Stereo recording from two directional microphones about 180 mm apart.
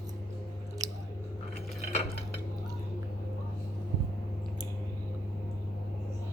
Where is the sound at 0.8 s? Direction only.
20° right (ahead or behind).